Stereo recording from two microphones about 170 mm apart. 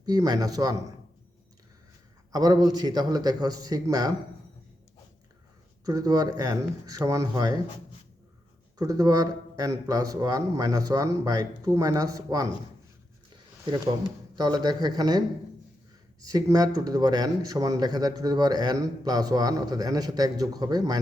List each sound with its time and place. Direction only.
0.0 s speech: 20° right (ahead or behind)
2.3 s speech: 20° right (ahead or behind)
5.8 s speech: 20° right (ahead or behind)
8.8 s speech: 20° right (ahead or behind)
14.3 s speech: 25° right (ahead or behind)
16.2 s speech: 20° right (ahead or behind)